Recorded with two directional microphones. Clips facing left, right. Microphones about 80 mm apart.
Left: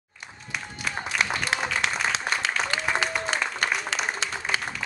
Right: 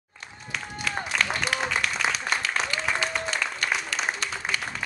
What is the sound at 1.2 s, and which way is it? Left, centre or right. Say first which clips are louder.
Applause: left 1 dB; centre.